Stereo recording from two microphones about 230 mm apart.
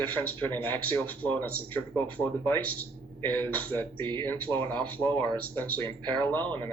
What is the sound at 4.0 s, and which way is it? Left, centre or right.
Speech, centre.